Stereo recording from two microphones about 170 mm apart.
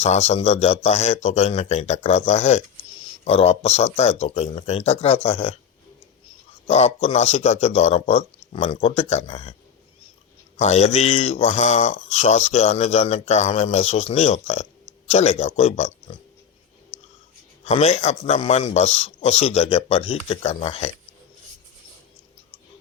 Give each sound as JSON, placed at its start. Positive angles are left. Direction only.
{"t": 0.0, "sound": "speech", "side_deg": 40}
{"t": 6.7, "sound": "speech", "side_deg": 40}
{"t": 10.6, "sound": "speech", "side_deg": 40}
{"t": 17.7, "sound": "speech", "side_deg": 40}